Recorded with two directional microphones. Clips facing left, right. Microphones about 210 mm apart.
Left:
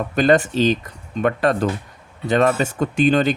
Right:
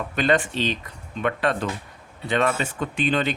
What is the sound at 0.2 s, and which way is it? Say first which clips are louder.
Speech: left 6 dB; 40° left (ahead or behind).